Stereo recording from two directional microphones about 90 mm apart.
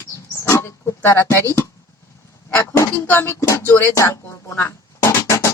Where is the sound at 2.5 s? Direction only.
30° left (ahead or behind).